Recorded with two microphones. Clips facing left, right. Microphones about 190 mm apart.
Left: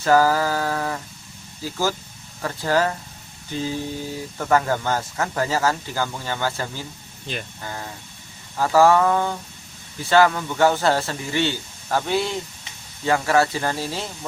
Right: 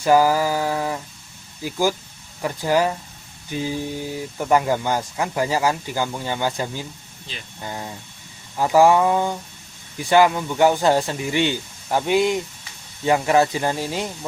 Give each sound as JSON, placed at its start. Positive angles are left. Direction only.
{"t": 0.0, "sound": "speech", "side_deg": -15}
{"t": 7.3, "sound": "speech", "side_deg": 55}
{"t": 7.6, "sound": "speech", "side_deg": -20}